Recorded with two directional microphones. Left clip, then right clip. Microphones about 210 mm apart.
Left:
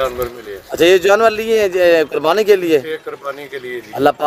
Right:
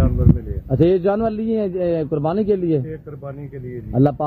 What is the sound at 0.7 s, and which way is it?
Speech, 10° left (ahead or behind).